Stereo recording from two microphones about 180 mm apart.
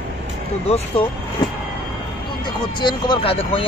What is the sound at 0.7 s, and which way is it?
Speech, 30° left (ahead or behind).